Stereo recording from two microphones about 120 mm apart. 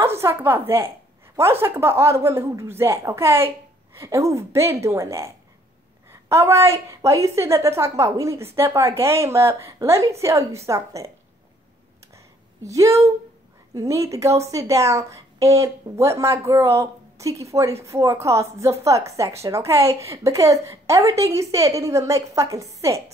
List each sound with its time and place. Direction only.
0.0 s a woman's voice: 20° right (ahead or behind)
12.6 s a woman's voice: 25° right (ahead or behind)